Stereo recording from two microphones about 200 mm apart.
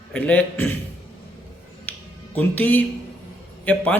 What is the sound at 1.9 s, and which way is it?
Music, 10° left (ahead or behind).